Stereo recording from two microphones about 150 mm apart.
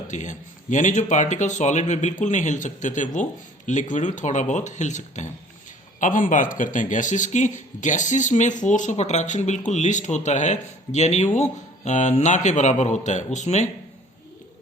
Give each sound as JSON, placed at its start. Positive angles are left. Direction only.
{"t": 0.1, "sound": "speech", "side_deg": 55}